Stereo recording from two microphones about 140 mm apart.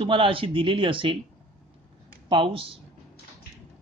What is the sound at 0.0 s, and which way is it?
Speech, 40° right (ahead or behind).